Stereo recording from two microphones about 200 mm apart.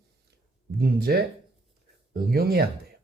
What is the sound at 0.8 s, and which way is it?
Speech, 50° right (ahead or behind).